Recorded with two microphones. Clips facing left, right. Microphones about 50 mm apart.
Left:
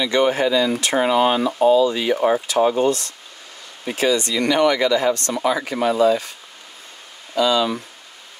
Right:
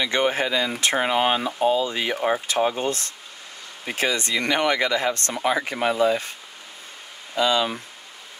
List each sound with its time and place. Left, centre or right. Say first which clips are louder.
0.0 s speech: left 4 dB; right
7.4 s speech: left 3 dB; right